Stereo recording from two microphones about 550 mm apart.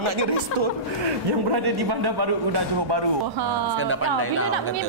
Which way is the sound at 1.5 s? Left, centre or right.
Right.